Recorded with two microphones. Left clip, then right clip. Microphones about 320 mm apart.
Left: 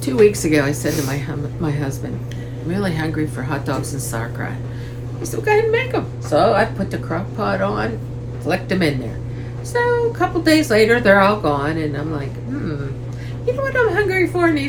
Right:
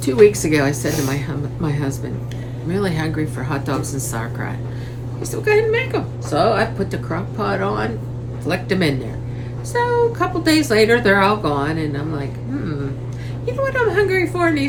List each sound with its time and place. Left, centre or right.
0.0 s a woman's voice: centre
13.4 s a woman's voice: centre